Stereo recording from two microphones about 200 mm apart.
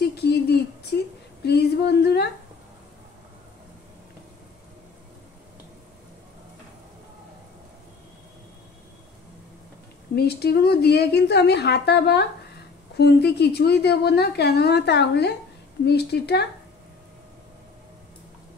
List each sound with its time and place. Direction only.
0.0 s a sound: 55° left (ahead or behind)
1.4 s female singing: 55° left (ahead or behind)
10.1 s speech: 50° left (ahead or behind)